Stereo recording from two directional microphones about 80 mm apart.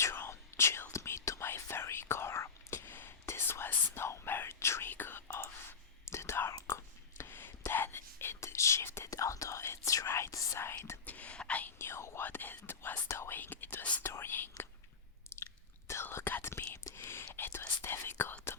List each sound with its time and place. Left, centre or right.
0.0 s whispering: left
11.0 s whispering: centre
11.8 s whispering: left
15.9 s whispering: left